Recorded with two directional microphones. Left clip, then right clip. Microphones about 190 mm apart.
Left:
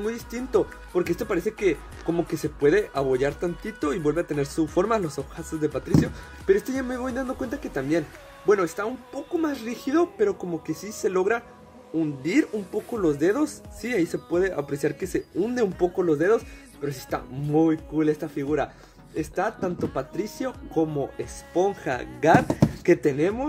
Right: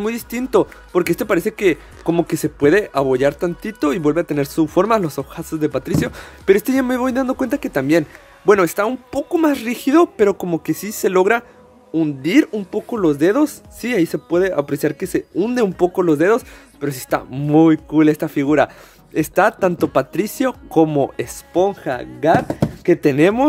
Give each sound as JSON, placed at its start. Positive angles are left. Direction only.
{"t": 0.0, "sound": "speech", "side_deg": -45}
{"t": 11.9, "sound": "speech", "side_deg": -30}
{"t": 21.6, "sound": "speech", "side_deg": -25}
{"t": 23.0, "sound": "speech", "side_deg": -45}